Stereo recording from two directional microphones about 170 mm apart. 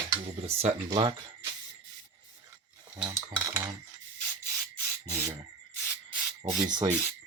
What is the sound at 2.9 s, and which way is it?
Cutlery, 30° right (ahead or behind).